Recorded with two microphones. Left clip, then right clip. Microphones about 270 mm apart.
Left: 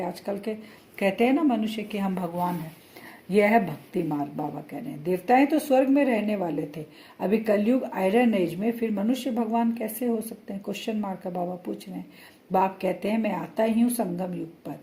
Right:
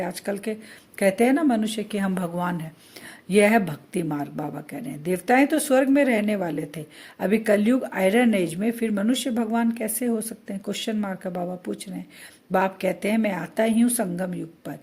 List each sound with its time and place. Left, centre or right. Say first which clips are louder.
0.0 s a woman's voice: right 2 dB; right